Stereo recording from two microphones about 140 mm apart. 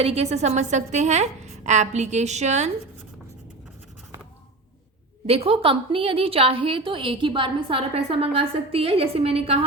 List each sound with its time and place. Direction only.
0.0 s a woman's voice: 50° right (ahead or behind)
5.2 s a woman's voice: 45° right (ahead or behind)